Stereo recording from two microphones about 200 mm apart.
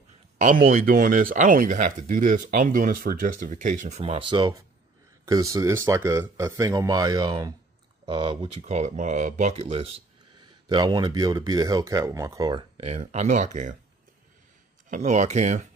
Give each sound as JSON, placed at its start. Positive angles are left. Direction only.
{"t": 0.4, "sound": "speech", "side_deg": -40}
{"t": 14.9, "sound": "speech", "side_deg": -35}